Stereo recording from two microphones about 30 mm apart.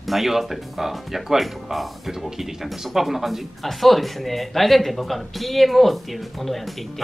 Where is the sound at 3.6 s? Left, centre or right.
Centre.